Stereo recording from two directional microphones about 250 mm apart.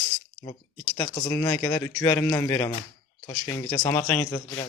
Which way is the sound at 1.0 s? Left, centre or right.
Centre.